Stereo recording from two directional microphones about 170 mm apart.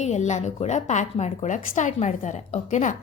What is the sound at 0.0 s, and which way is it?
A woman's voice, 45° left (ahead or behind).